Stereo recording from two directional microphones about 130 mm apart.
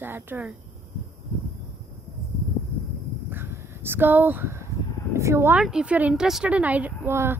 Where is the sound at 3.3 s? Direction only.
20° right (ahead or behind).